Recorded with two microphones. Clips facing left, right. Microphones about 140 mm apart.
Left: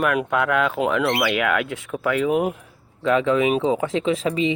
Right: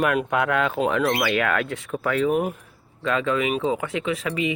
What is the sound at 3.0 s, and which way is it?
Speech, 20° left (ahead or behind).